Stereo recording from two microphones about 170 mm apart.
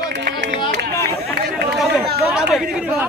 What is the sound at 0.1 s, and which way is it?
Music, 85° right.